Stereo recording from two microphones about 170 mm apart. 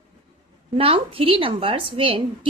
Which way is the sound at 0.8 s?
35° right (ahead or behind).